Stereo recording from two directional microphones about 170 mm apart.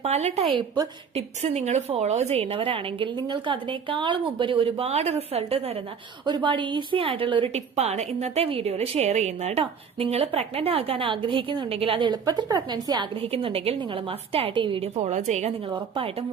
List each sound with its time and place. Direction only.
0.0 s a woman's voice: 40° right (ahead or behind)
15.6 s a woman's voice: 30° right (ahead or behind)